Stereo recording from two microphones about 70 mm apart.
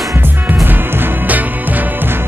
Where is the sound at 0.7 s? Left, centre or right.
Right.